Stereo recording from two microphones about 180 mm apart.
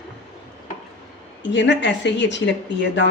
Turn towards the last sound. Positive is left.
turn(degrees=80)